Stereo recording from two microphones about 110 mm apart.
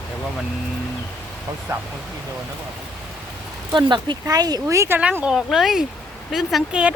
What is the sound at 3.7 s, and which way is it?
Speech, 45° right (ahead or behind).